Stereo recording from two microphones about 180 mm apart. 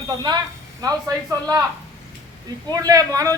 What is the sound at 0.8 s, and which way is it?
Speech, 20° right (ahead or behind).